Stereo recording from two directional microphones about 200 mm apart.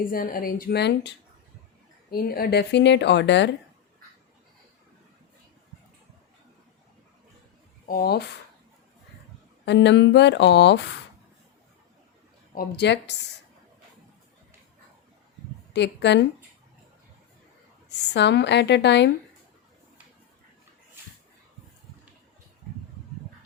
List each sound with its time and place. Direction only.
0.0 s speech: 45° left (ahead or behind); by 3.5 s 60° left (ahead or behind)
7.9 s speech: 50° left (ahead or behind)
9.6 s speech: 60° left (ahead or behind)
12.5 s speech: 55° left (ahead or behind)
15.7 s speech: 60° left (ahead or behind)
17.8 s speech: 60° left (ahead or behind)